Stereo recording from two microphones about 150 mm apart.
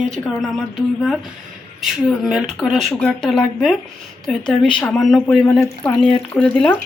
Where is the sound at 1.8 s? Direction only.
Centre (ahead or behind).